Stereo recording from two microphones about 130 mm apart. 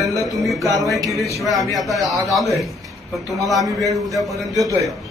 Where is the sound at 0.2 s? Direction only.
Centre (ahead or behind).